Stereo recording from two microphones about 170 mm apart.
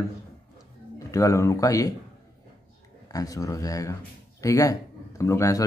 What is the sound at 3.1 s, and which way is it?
Speech, 20° left (ahead or behind).